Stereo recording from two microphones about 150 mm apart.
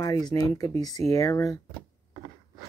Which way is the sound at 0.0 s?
25° left (ahead or behind).